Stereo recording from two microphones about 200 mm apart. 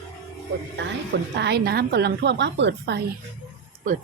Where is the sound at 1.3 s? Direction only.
55° right (ahead or behind).